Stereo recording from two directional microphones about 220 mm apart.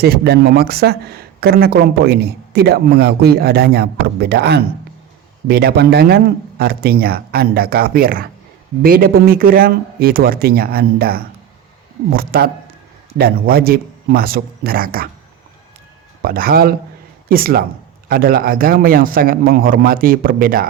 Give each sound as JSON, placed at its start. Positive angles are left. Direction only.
{"t": 0.0, "sound": "speech", "side_deg": -45}
{"t": 16.2, "sound": "a man's voice", "side_deg": -40}